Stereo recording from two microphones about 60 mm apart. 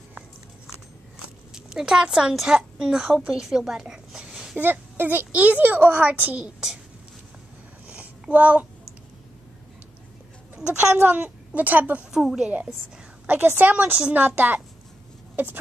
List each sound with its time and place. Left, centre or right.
1.5 s a woman's voice: centre
4.6 s a child's voice: right
7.8 s a sound: right
10.5 s a woman's voice: right
12.1 s a woman's voice: centre
13.3 s a child's voice: right